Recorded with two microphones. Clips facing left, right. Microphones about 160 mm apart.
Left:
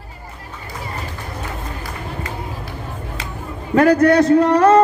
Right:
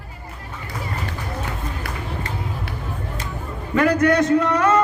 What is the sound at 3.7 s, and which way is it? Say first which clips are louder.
A man's voice: left 5 dB; 35° left (ahead or behind).